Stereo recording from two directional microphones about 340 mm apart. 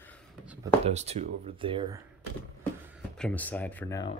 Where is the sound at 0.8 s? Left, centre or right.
Centre.